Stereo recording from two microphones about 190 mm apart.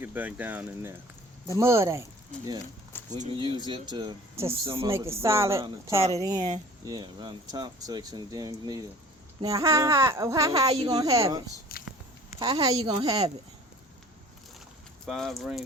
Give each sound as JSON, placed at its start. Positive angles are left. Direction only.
{"t": 0.0, "sound": "speech", "side_deg": -10}
{"t": 3.1, "sound": "speech", "side_deg": -40}
{"t": 3.3, "sound": "speech", "side_deg": -25}
{"t": 11.7, "sound": "biting", "side_deg": 50}
{"t": 12.4, "sound": "speech", "side_deg": -20}
{"t": 15.0, "sound": "speech", "side_deg": 0}